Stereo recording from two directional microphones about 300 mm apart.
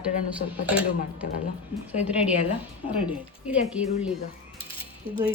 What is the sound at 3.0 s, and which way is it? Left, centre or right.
Speech, centre.